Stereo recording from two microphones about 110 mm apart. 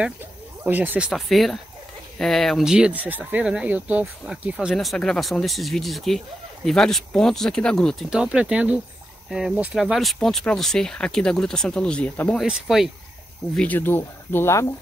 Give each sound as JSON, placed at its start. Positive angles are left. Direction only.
{"t": 0.7, "sound": "speech", "side_deg": -15}
{"t": 1.1, "sound": "speech", "side_deg": 0}
{"t": 4.7, "sound": "speech", "side_deg": 5}
{"t": 12.4, "sound": "speech", "side_deg": -5}
{"t": 13.6, "sound": "speech", "side_deg": 15}